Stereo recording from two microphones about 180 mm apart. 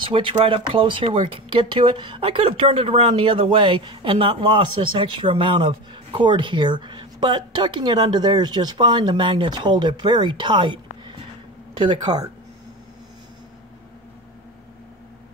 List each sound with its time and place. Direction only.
0.0 s speech: 30° right (ahead or behind)